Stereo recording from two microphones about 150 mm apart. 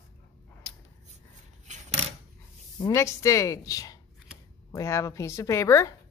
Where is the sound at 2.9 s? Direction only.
20° left (ahead or behind).